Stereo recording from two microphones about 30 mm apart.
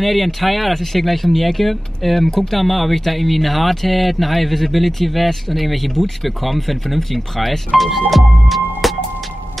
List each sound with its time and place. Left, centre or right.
0.0 s speech: centre
2.2 s speech: centre
2.6 s speech: centre
8.1 s music: centre